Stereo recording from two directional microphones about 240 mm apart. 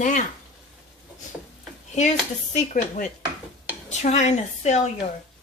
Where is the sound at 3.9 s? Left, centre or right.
Left.